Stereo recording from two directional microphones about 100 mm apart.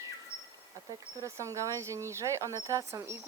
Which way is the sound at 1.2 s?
30° right (ahead or behind).